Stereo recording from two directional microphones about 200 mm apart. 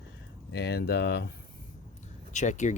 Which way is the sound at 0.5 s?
55° left (ahead or behind).